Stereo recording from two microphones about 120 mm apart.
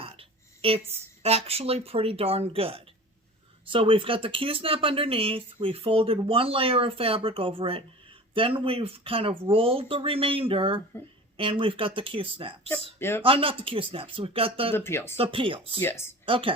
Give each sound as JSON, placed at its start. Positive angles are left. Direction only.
{"t": 0.0, "sound": "a sound", "side_deg": -50}
{"t": 1.2, "sound": "speech", "side_deg": -55}
{"t": 13.0, "sound": "speech", "side_deg": 20}
{"t": 13.2, "sound": "speech", "side_deg": -50}
{"t": 14.8, "sound": "speech", "side_deg": 20}
{"t": 15.1, "sound": "speech", "side_deg": -50}
{"t": 15.8, "sound": "speech", "side_deg": 20}
{"t": 16.2, "sound": "a woman's voice", "side_deg": -45}